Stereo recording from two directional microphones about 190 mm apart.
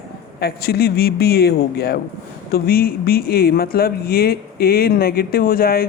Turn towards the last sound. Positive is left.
turn(degrees=50)  # may be behind; listen again after turning